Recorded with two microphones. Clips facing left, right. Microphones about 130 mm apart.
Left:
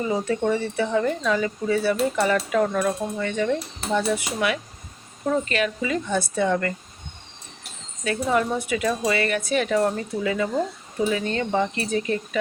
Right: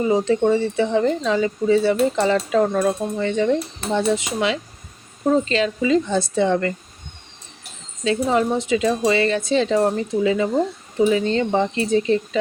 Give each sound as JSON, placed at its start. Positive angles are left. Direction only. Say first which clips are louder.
{"t": 0.0, "sound": "speech", "louder": "right 6 dB", "side_deg": -25}
{"t": 8.0, "sound": "speech", "louder": "right 4 dB", "side_deg": -25}